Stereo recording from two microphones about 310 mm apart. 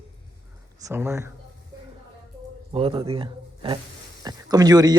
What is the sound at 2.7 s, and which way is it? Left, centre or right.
A man's voice, centre.